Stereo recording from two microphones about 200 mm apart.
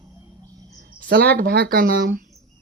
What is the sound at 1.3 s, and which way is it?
Speech, 50° right (ahead or behind).